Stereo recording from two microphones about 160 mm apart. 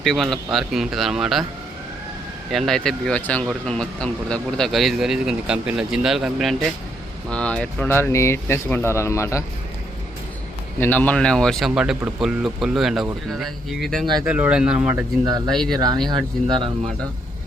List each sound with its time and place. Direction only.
0.0 s speech: centre (ahead or behind)
2.5 s speech: centre (ahead or behind); by 9.4 s 15° left (ahead or behind)
10.8 s speech: 10° left (ahead or behind); by 15.0 s 5° right (ahead or behind)
15.2 s speech: 25° right (ahead or behind)
15.4 s speech: centre (ahead or behind)